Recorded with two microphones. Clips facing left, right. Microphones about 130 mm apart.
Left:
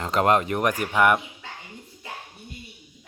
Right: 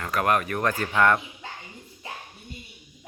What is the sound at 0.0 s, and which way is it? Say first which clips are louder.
Speech: left 3 dB; 25° left (ahead or behind).